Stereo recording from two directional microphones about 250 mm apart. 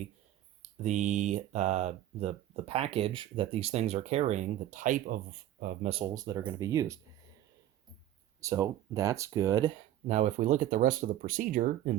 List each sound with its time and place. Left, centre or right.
0.6 s speech: right; by 7.0 s centre
8.4 s speech: centre
10.1 s speech: right